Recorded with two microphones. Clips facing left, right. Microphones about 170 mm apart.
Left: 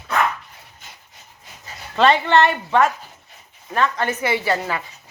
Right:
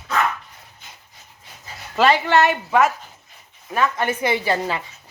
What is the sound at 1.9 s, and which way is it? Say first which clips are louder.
A woman's voice: left 1 dB; 5° right (ahead or behind).